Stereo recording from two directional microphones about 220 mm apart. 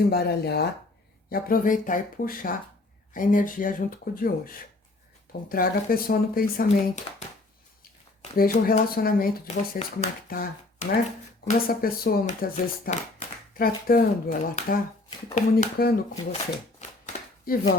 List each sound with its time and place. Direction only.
0.0 s speech: 45° left (ahead or behind)
8.4 s speech: 40° left (ahead or behind)
17.1 s a sound: 40° left (ahead or behind)